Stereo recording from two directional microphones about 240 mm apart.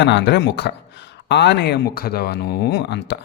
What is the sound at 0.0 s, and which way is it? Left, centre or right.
A man's voice, left.